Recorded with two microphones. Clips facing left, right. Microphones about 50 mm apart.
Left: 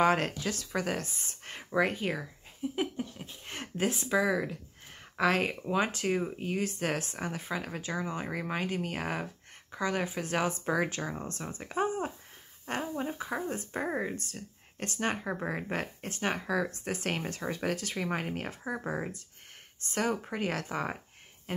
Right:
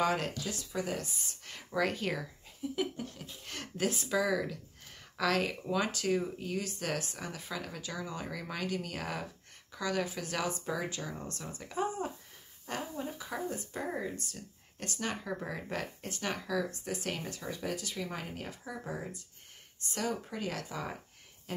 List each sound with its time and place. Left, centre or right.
0.0 s speech: left
0.4 s speech: left
1.7 s speech: left
10.7 s speech: left